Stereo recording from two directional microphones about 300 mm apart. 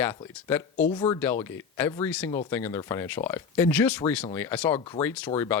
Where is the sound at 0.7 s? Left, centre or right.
Centre.